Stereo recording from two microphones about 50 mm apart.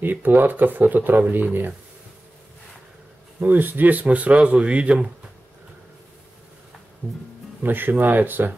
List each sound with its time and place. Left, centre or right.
0.0 s speech: right
3.3 s speech: right
7.0 s speech: right
7.6 s speech: right